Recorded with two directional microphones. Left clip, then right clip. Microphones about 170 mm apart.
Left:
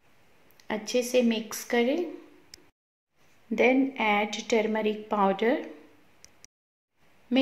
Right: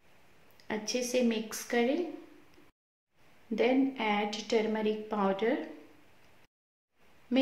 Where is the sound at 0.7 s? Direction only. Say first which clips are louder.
Left 5 dB; 15° left (ahead or behind).